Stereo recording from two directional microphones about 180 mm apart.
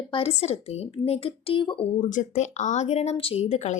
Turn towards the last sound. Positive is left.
turn(degrees=40)  # may be behind; listen again after turning